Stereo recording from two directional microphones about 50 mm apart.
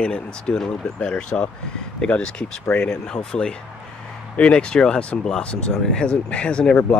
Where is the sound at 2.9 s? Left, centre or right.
Centre.